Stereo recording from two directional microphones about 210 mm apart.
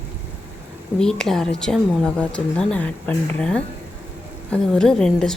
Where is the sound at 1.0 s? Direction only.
5° left (ahead or behind).